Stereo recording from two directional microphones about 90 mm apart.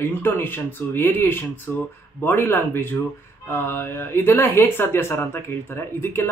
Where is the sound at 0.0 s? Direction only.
25° left (ahead or behind).